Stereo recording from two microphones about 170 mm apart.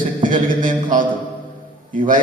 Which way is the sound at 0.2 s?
50° right (ahead or behind).